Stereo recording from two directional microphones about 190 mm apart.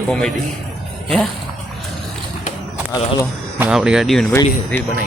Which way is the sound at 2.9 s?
25° left (ahead or behind).